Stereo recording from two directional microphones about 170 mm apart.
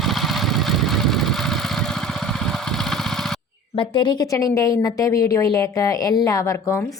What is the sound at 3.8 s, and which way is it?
A woman's voice, 25° left (ahead or behind).